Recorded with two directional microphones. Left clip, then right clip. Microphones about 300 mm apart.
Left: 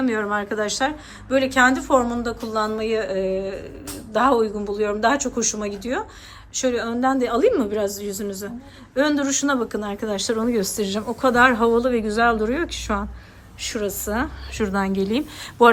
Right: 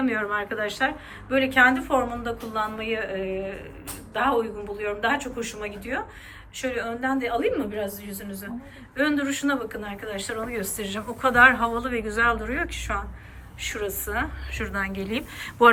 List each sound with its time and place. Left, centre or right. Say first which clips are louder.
0.0 s speech: left 3 dB; centre
9.0 s speech: left 4 dB; centre